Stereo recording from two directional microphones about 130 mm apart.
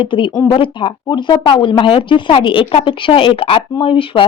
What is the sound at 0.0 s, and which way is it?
Speech, 40° left (ahead or behind).